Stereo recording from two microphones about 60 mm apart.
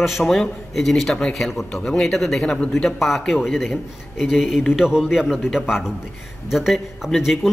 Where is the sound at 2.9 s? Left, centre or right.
Centre.